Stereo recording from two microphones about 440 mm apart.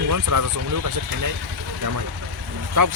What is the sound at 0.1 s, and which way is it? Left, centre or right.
Speech, right.